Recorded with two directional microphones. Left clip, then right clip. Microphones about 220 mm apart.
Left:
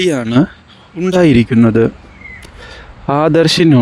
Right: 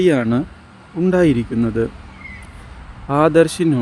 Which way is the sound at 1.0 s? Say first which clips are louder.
Left 5 dB; 40° left (ahead or behind).